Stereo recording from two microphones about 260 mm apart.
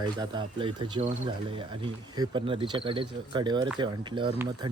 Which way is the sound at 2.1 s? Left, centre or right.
Centre.